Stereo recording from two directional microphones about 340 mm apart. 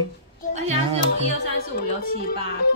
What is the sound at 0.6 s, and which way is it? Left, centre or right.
Speech, centre.